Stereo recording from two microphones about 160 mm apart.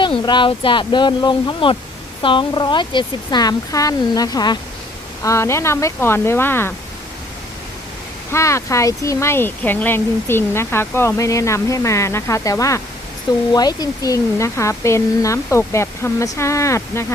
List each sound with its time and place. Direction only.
0.3 s speech: 30° left (ahead or behind); by 6.7 s 15° left (ahead or behind)
8.3 s speech: 15° left (ahead or behind)